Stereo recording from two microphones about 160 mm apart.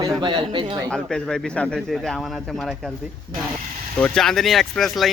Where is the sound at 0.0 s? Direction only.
30° right (ahead or behind).